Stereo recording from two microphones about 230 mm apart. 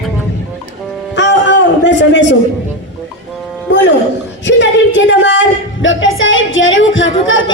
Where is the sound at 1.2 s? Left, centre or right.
Left.